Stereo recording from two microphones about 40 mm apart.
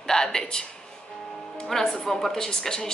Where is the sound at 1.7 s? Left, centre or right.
Centre.